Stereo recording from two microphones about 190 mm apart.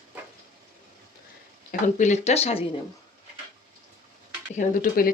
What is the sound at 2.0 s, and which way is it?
Speech, 35° left (ahead or behind).